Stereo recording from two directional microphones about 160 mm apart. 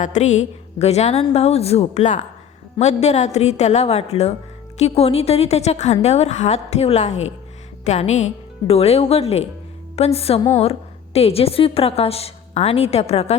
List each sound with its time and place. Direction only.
0.0 s a woman's voice: 45° left (ahead or behind)